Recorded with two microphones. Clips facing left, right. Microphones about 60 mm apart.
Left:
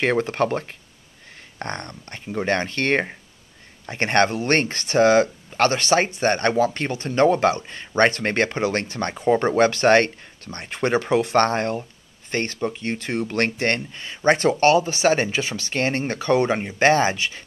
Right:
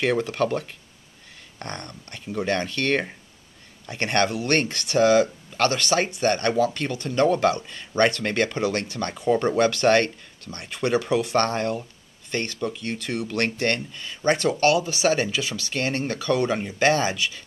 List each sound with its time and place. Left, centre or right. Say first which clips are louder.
0.0 s speech: left 2 dB; left